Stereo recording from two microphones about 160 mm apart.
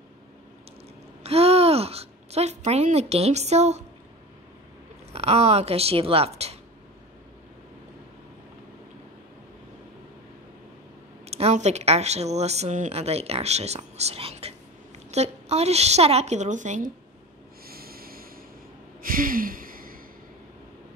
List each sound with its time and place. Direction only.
1.2 s a woman's voice: 40° right (ahead or behind)
5.1 s speech: 40° right (ahead or behind)
11.2 s speech: 40° right (ahead or behind)
17.6 s snort: 70° right (ahead or behind)
19.0 s a sound: 60° right (ahead or behind)